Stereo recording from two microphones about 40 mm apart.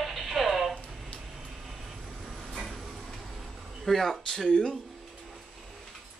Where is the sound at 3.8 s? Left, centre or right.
Centre.